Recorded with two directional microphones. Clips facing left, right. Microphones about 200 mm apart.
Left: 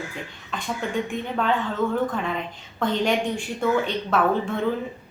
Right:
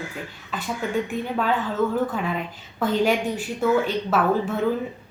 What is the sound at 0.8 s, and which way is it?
A woman's voice, 5° right (ahead or behind).